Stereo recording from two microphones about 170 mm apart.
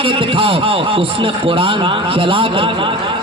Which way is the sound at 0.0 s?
30° right (ahead or behind).